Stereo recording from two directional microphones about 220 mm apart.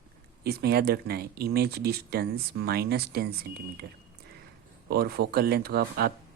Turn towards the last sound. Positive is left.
turn(degrees=-45)  # may be behind; listen again after turning